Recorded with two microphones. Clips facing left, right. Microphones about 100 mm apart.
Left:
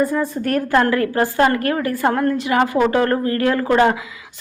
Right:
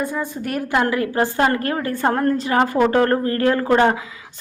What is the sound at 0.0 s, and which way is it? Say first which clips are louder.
A woman's voice: left 5 dB; centre (ahead or behind).